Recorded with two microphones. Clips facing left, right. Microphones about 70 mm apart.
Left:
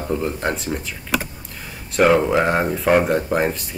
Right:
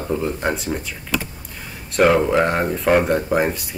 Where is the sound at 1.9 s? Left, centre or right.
Centre.